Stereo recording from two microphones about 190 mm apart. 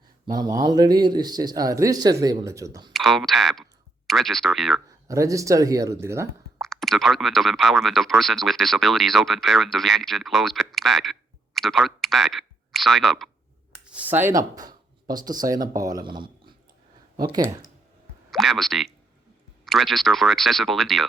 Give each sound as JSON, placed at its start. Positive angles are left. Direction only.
{"t": 0.3, "sound": "a man's voice", "side_deg": -20}
{"t": 2.9, "sound": "speech", "side_deg": 0}
{"t": 5.0, "sound": "speech", "side_deg": -15}
{"t": 6.6, "sound": "a man's voice", "side_deg": 0}
{"t": 18.3, "sound": "speech", "side_deg": 0}